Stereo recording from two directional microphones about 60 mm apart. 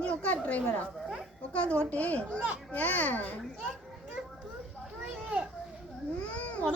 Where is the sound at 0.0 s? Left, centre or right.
Left.